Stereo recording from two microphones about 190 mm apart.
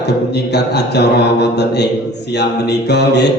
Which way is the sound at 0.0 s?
60° left (ahead or behind).